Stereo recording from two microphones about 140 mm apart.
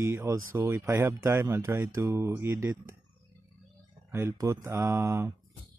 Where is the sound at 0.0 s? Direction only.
20° right (ahead or behind).